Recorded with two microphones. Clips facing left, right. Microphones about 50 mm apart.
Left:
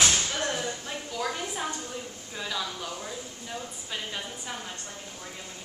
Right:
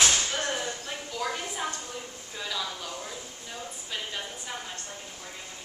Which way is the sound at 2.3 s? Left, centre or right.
Centre.